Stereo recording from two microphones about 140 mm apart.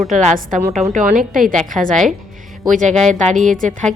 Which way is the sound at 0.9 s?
70° right (ahead or behind).